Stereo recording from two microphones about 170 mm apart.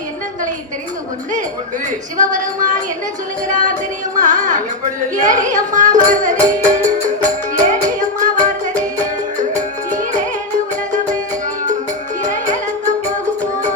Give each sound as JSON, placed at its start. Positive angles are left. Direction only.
{"t": 2.1, "sound": "speech", "side_deg": -50}
{"t": 4.2, "sound": "speech", "side_deg": -45}
{"t": 9.4, "sound": "music", "side_deg": -45}
{"t": 12.2, "sound": "music", "side_deg": -45}